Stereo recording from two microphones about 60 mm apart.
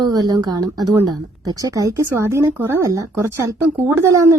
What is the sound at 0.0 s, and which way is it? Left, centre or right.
Speech, right.